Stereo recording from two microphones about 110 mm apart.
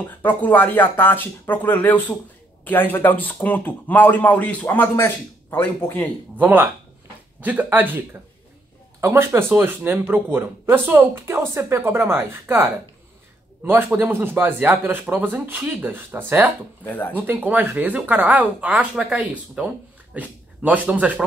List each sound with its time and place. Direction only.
0.2 s speech: 15° left (ahead or behind)
6.3 s speech: 15° right (ahead or behind)
13.9 s speech: 20° right (ahead or behind)
16.8 s speech: 15° left (ahead or behind)
17.3 s speech: 15° right (ahead or behind)